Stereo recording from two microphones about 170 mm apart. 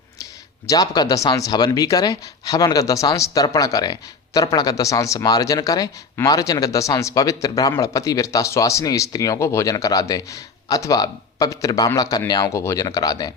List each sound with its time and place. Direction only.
0.7 s speech: 20° left (ahead or behind)